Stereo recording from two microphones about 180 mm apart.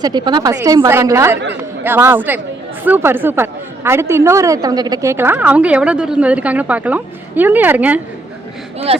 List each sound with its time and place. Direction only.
0.0 s a woman's voice: 25° right (ahead or behind); by 8.0 s 10° right (ahead or behind)
8.9 s speech: 30° right (ahead or behind)